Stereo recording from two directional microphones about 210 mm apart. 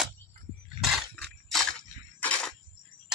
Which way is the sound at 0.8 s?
Centre (ahead or behind).